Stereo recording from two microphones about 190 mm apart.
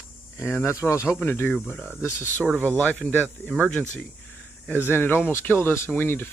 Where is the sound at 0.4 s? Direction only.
15° left (ahead or behind).